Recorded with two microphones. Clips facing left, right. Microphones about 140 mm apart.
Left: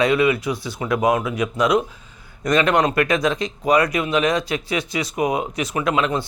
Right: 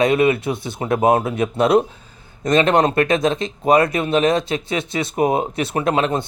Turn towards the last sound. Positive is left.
turn(degrees=-30)  # may be behind; listen again after turning